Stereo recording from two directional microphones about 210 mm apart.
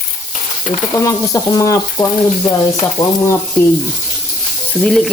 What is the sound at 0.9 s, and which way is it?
Speech, 15° left (ahead or behind).